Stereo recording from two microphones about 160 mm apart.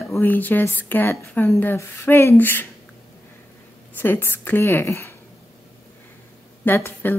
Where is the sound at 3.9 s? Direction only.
15° left (ahead or behind).